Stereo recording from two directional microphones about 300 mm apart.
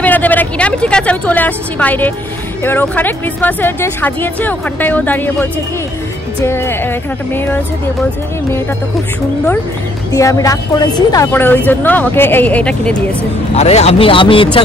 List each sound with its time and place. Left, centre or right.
0.0 s speech: centre
10.1 s speech: centre
13.6 s speech: left